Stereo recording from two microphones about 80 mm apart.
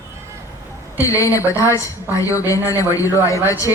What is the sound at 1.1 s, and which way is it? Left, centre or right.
A woman's voice, left.